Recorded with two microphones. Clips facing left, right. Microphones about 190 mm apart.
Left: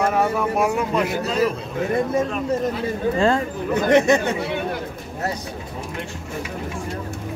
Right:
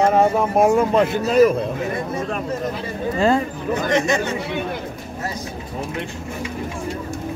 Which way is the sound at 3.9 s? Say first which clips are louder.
Left 5 dB; 60° left (ahead or behind).